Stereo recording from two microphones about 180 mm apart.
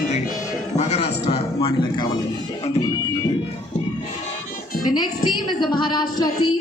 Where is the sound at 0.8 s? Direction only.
35° left (ahead or behind).